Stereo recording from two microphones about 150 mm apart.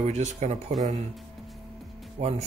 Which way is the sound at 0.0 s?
50° right (ahead or behind).